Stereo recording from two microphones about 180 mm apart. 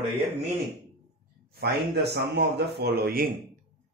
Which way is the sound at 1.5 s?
65° right (ahead or behind).